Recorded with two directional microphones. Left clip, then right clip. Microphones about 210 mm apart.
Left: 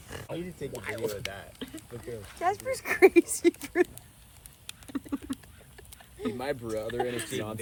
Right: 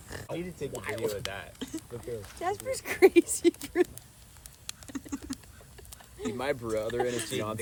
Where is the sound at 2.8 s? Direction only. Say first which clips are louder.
Left 1 dB; 15° left (ahead or behind).